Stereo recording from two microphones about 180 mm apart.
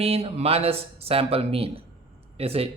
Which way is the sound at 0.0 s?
35° right (ahead or behind).